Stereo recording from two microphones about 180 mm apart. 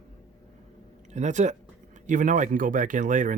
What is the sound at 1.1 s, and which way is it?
Speech, 40° right (ahead or behind).